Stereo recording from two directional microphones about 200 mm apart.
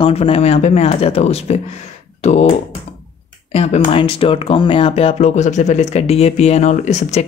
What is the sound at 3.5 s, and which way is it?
Speech, 30° left (ahead or behind).